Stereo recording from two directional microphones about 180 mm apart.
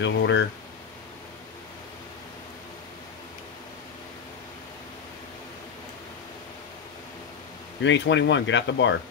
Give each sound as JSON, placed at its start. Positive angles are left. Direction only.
{"t": 0.0, "sound": "speech", "side_deg": 85}
{"t": 7.8, "sound": "speech", "side_deg": 80}